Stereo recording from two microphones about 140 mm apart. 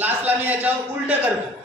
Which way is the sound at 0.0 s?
15° right (ahead or behind).